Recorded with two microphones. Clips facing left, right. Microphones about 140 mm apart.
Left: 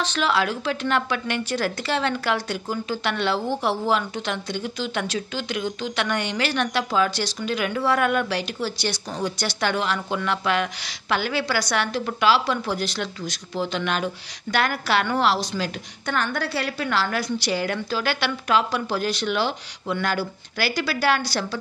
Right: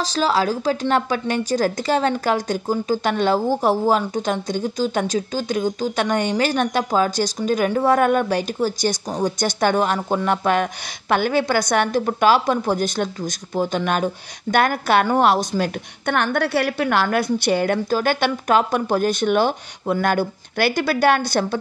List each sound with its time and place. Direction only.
0.0 s a woman's voice: 35° right (ahead or behind); by 21.5 s 55° right (ahead or behind)